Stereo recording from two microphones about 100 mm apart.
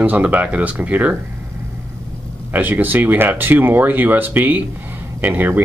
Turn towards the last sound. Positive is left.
turn(degrees=-20)  # may be behind; listen again after turning